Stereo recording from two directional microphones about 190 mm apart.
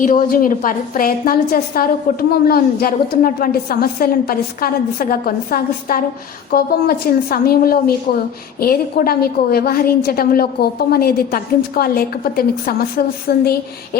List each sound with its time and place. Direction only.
0.0 s a woman's voice: 45° left (ahead or behind)